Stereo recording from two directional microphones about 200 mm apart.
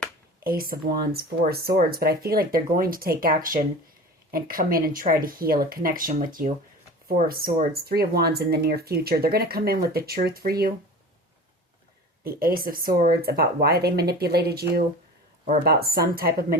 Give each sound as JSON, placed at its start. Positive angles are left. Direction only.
{"t": 0.3, "sound": "speech", "side_deg": -45}
{"t": 12.2, "sound": "speech", "side_deg": -45}